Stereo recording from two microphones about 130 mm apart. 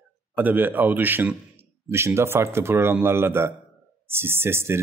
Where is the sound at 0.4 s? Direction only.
15° right (ahead or behind).